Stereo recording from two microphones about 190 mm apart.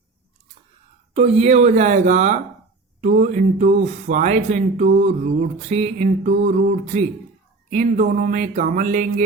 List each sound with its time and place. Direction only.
1.1 s speech: 35° right (ahead or behind)